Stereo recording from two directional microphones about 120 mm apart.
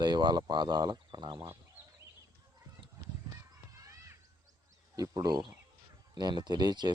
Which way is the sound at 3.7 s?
25° right (ahead or behind).